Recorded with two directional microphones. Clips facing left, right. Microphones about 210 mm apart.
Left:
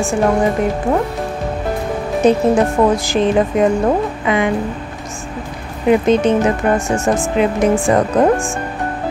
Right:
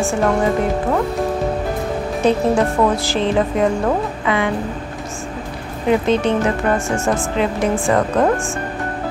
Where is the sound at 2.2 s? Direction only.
20° left (ahead or behind).